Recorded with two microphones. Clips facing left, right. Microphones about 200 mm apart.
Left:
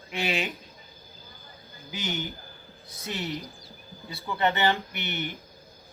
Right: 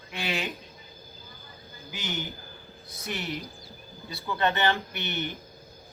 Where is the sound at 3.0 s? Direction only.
15° right (ahead or behind).